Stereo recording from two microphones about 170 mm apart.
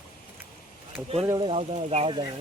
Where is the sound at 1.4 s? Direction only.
35° right (ahead or behind).